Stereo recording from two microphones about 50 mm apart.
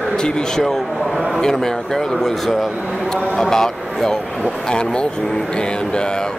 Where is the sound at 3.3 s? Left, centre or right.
Centre.